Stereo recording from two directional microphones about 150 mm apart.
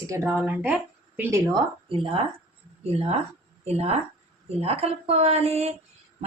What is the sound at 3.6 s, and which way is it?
A woman's voice, 45° right (ahead or behind).